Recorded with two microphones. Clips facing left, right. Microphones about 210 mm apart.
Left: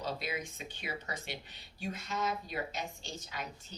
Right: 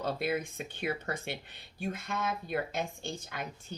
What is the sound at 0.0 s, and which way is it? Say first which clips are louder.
Speech: right 6 dB; 55° right (ahead or behind).